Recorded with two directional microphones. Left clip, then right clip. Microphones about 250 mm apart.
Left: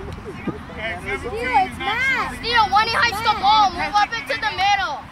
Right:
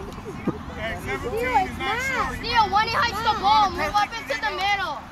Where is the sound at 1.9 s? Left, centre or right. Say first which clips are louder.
Left 4 dB; left.